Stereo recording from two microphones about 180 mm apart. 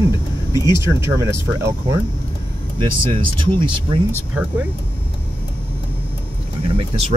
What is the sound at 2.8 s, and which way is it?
Speech, 25° right (ahead or behind).